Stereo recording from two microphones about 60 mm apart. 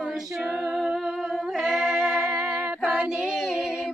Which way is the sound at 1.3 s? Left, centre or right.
Centre.